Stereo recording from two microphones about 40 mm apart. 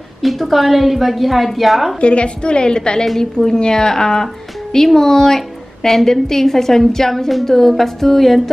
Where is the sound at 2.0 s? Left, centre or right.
Left.